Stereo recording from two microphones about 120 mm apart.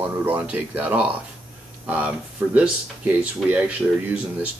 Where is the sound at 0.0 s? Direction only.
15° right (ahead or behind).